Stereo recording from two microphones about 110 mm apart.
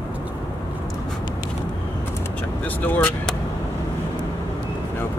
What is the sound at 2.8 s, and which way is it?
Speech, 15° left (ahead or behind).